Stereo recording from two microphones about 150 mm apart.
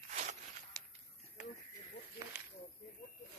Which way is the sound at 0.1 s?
50° right (ahead or behind).